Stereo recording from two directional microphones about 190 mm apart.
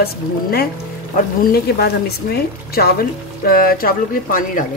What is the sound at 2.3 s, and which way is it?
Speech, 55° left (ahead or behind).